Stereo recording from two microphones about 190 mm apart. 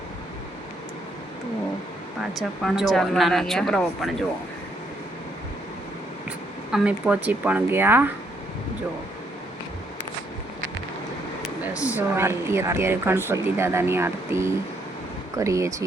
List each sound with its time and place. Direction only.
2.6 s speech: centre (ahead or behind)
6.7 s speech: 5° right (ahead or behind)
11.6 s speech: 5° right (ahead or behind)